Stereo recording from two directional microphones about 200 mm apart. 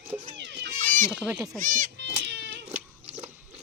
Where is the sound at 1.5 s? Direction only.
40° right (ahead or behind).